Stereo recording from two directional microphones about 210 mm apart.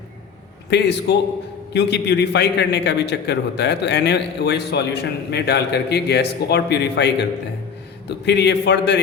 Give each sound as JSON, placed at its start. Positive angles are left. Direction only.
{"t": 0.7, "sound": "a man's voice", "side_deg": 55}